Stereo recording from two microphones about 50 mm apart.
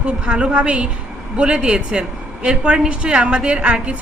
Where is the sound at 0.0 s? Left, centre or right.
Right.